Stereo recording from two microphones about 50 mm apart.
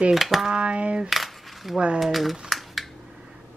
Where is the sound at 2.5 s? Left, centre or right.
Centre.